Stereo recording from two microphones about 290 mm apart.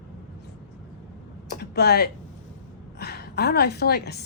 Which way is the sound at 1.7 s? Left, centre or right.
Left.